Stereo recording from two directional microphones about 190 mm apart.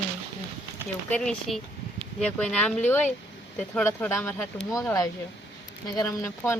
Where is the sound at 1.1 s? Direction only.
5° left (ahead or behind).